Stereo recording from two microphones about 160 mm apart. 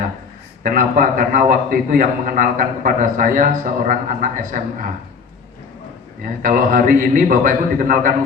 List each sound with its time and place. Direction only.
0.6 s a man's voice: 60° right (ahead or behind)
6.2 s a man's voice: 55° right (ahead or behind)